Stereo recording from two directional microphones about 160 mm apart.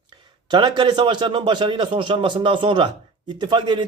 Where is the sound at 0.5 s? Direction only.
30° right (ahead or behind).